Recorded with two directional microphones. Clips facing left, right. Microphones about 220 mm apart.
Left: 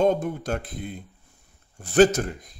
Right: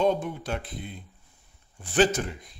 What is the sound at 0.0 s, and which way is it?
Speech, 45° left (ahead or behind).